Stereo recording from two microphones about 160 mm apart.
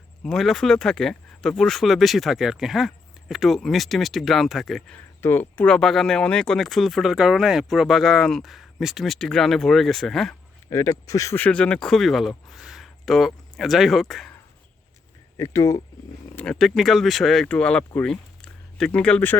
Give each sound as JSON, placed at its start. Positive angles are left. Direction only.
{"t": 0.2, "sound": "speech", "side_deg": 0}
{"t": 5.2, "sound": "speech", "side_deg": 10}
{"t": 10.7, "sound": "speech", "side_deg": 20}
{"t": 15.4, "sound": "speech", "side_deg": 20}
{"t": 16.3, "sound": "speech", "side_deg": 5}